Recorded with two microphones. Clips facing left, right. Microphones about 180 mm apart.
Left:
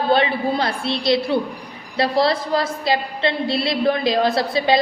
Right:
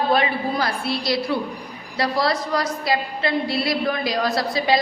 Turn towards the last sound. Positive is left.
turn(degrees=25)  # may be behind; listen again after turning